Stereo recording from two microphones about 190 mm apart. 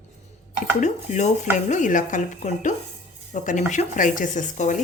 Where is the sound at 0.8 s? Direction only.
40° left (ahead or behind).